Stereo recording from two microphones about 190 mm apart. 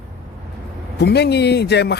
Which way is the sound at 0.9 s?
60° left (ahead or behind).